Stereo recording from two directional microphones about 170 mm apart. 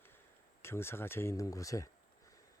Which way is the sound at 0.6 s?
15° left (ahead or behind).